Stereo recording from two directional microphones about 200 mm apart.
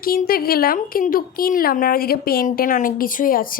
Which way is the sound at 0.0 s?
50° left (ahead or behind).